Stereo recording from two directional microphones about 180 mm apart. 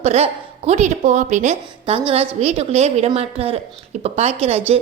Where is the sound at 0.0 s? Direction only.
35° right (ahead or behind).